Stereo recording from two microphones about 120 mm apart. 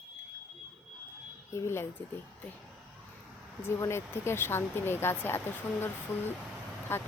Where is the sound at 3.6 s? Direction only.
20° left (ahead or behind).